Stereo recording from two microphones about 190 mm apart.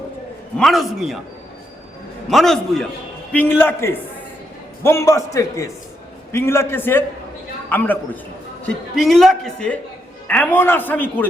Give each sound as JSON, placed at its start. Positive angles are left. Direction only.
{"t": 0.5, "sound": "a man's voice", "side_deg": 0}
{"t": 2.3, "sound": "a man's voice", "side_deg": 0}